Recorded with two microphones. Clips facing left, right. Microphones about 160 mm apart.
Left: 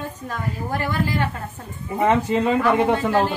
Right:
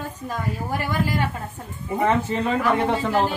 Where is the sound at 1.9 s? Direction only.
15° left (ahead or behind).